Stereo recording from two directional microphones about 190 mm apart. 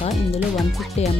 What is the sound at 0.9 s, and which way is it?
Speech, 35° left (ahead or behind).